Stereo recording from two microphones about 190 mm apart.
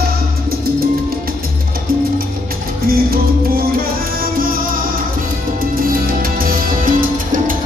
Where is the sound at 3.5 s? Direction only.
50° right (ahead or behind).